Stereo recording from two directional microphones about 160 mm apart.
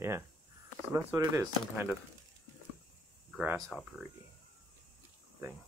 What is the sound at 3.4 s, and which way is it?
Speech, 5° right (ahead or behind).